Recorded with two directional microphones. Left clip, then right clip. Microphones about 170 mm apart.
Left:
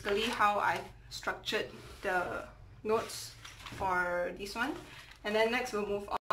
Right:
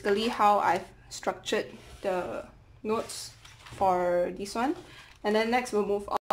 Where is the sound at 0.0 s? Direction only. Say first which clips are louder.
Right 5 dB; 35° right (ahead or behind).